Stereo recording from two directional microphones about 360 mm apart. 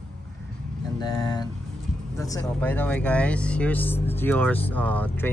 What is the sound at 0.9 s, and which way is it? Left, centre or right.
Speech, centre.